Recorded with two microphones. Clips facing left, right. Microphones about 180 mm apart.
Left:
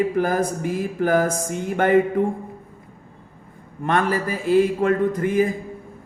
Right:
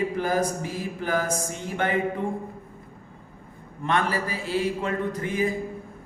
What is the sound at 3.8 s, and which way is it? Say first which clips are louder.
A man's voice: left 4 dB; 50° left (ahead or behind).